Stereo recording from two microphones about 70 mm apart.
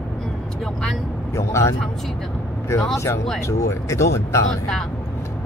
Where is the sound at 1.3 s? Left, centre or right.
Left.